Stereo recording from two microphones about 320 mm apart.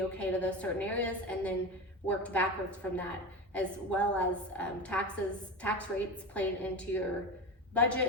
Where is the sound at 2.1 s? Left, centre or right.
Centre.